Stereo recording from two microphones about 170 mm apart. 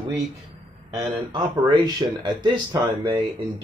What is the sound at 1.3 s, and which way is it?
Speech, 25° right (ahead or behind).